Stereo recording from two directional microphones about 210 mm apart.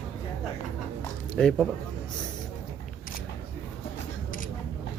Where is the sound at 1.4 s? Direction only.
Centre (ahead or behind).